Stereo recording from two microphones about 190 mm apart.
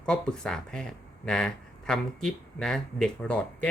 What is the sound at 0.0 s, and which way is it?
Speech, 5° left (ahead or behind).